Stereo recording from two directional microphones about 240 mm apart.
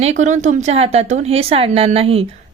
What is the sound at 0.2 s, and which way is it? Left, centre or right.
A woman's voice, right.